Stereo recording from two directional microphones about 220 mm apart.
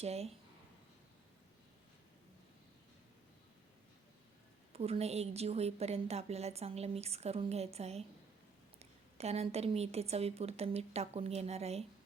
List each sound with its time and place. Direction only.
0.0 s a woman's voice: 30° right (ahead or behind)
4.7 s a woman's voice: 30° right (ahead or behind)